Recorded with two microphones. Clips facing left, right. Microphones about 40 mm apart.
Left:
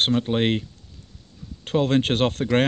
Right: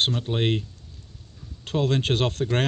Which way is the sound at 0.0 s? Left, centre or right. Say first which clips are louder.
Left 4 dB; left.